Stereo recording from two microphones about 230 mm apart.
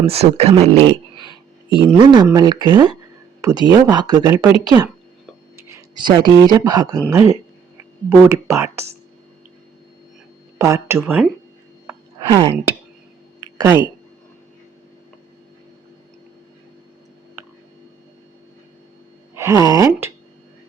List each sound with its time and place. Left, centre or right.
0.1 s speech: right; by 9.0 s centre
10.6 s speech: centre
11.9 s a sound: centre
19.3 s speech: centre